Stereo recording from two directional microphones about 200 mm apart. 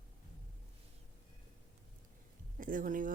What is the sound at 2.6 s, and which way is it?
Speech, 40° right (ahead or behind).